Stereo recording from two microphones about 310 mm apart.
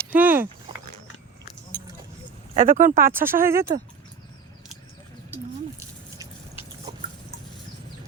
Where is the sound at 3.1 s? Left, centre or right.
Centre.